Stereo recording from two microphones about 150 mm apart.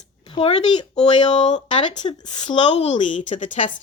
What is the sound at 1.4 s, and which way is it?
A woman's voice, 30° left (ahead or behind).